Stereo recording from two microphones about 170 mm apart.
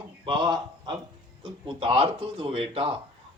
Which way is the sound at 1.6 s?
30° right (ahead or behind).